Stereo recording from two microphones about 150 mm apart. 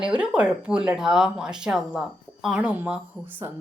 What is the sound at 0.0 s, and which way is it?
Speech, 5° right (ahead or behind).